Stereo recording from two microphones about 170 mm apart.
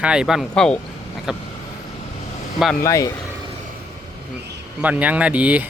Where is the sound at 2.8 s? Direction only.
20° left (ahead or behind).